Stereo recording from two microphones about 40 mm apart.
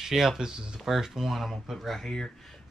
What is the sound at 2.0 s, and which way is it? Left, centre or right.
Speech, centre.